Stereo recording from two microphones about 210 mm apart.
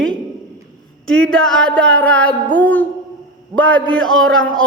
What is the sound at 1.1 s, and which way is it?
A man's voice, 5° left (ahead or behind).